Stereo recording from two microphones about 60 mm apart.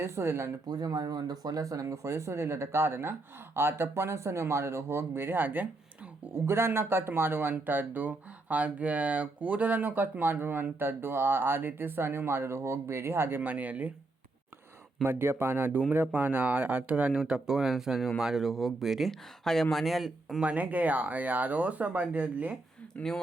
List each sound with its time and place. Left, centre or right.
0.0 s speech: right
0.8 s speech: right
6.3 s speech: right
15.0 s speech: right; by 20.4 s centre
20.4 s speech: right
23.0 s speech: left